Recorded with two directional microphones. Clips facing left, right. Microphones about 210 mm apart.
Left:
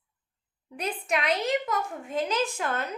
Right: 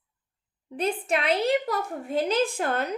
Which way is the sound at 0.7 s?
30° right (ahead or behind).